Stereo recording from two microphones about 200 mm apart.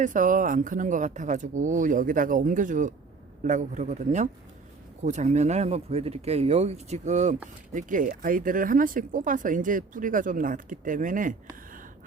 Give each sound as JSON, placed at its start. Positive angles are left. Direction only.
{"t": 0.0, "sound": "speech", "side_deg": -40}